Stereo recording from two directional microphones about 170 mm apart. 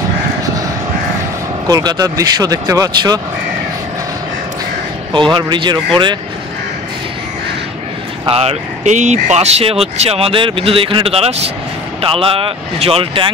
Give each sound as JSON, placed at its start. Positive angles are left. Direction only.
{"t": 1.7, "sound": "speech", "side_deg": -25}
{"t": 5.1, "sound": "speech", "side_deg": -25}
{"t": 8.3, "sound": "speech", "side_deg": -35}